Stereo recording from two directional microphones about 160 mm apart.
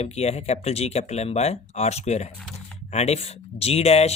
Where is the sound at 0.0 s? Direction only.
40° left (ahead or behind).